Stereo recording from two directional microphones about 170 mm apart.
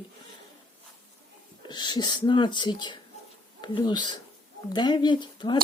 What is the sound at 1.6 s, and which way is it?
Speech, 25° left (ahead or behind).